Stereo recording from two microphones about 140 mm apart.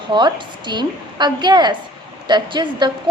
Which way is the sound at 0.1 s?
35° right (ahead or behind).